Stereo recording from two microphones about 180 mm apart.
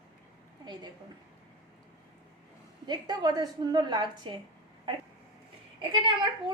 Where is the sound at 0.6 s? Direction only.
25° right (ahead or behind).